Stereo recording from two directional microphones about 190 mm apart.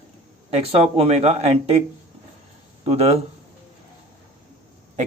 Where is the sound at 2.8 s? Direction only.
30° right (ahead or behind).